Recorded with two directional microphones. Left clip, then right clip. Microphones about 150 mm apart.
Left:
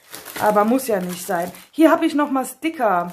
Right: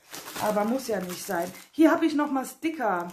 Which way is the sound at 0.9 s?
50° left (ahead or behind).